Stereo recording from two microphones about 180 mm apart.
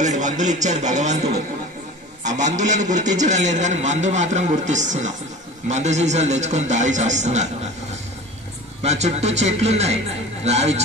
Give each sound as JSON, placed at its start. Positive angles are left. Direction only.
{"t": 0.0, "sound": "a man's voice", "side_deg": -40}
{"t": 8.8, "sound": "a man's voice", "side_deg": -40}